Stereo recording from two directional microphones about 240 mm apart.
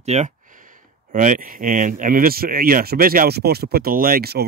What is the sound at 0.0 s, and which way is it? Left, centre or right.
Speech, right.